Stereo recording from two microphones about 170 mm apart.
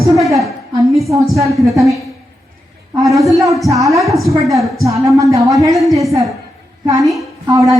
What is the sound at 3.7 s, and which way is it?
Speech, 20° right (ahead or behind).